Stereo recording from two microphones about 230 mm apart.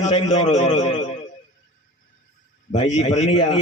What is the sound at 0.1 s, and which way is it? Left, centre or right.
Speech, left.